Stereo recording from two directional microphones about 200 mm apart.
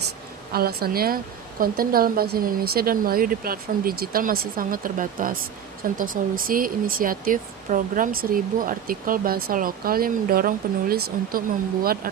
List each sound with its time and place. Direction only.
0.5 s speech: 50° right (ahead or behind)